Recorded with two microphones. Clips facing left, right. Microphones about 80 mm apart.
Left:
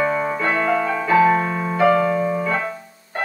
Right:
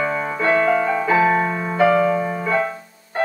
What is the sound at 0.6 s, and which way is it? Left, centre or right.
Music, centre.